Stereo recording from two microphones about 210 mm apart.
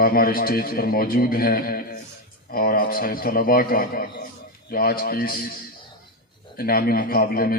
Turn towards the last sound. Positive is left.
turn(degrees=45)  # may be behind; listen again after turning